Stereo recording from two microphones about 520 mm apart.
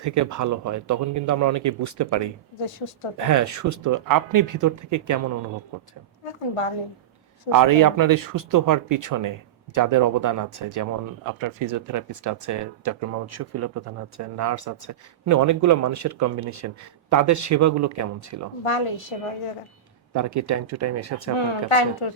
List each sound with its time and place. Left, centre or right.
0.0 s speech: right
2.6 s a woman's voice: left
3.2 s speech: right
7.5 s speech: right
18.6 s a woman's voice: left
20.1 s speech: right
21.3 s speech: left